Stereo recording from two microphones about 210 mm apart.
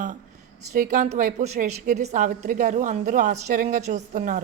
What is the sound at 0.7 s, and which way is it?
A woman's voice, 35° right (ahead or behind).